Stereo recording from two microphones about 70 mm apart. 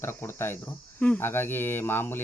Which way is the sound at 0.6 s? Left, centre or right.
Left.